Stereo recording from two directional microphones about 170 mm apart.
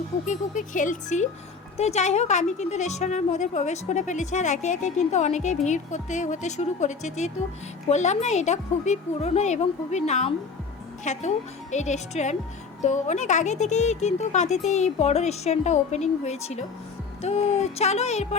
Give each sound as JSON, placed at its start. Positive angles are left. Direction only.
{"t": 0.3, "sound": "a woman's voice", "side_deg": 50}